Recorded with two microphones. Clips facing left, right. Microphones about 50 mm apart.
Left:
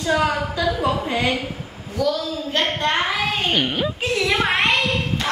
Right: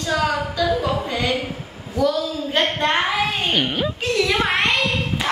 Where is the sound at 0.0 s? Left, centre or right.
Centre.